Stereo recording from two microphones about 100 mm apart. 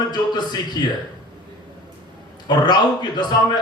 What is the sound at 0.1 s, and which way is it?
Speech, 45° left (ahead or behind).